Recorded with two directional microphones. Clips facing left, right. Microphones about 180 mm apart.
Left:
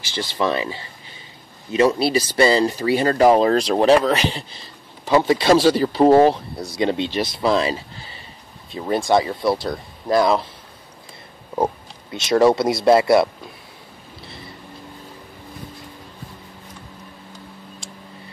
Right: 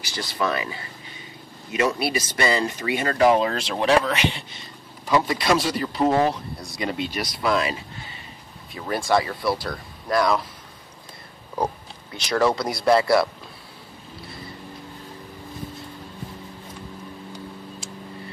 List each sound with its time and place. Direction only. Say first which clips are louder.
0.0 s speech: left 4 dB; 25° left (ahead or behind)
11.5 s speech: left 5 dB; 20° left (ahead or behind)